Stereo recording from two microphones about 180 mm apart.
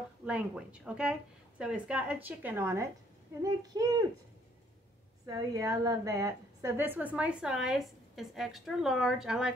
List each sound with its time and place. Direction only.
0.2 s a woman's voice: 5° right (ahead or behind)
5.2 s a woman's voice: 20° right (ahead or behind); by 9.5 s 5° right (ahead or behind)